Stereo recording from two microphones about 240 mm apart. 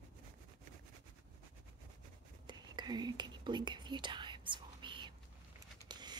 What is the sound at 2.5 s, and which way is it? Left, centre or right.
Whispering, centre.